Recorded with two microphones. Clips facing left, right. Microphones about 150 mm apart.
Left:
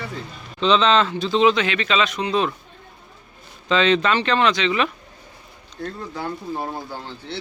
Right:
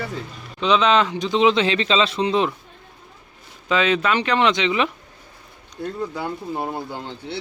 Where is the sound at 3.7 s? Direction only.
10° right (ahead or behind).